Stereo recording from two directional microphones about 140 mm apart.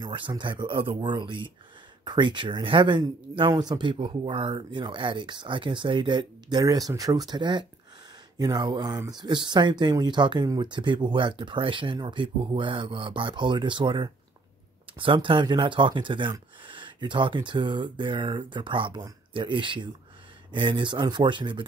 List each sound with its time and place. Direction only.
0.0 s speech: 35° right (ahead or behind)